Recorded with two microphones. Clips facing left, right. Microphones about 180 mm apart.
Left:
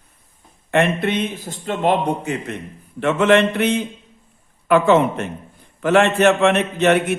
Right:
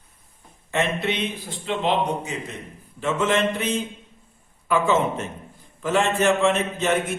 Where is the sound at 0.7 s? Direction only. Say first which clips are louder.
Left 6 dB; 55° left (ahead or behind).